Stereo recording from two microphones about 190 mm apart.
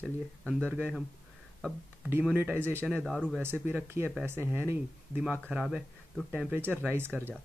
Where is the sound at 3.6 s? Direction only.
10° right (ahead or behind).